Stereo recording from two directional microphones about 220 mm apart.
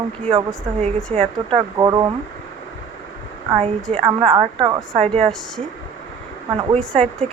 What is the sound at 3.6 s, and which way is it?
A woman's voice, 25° right (ahead or behind).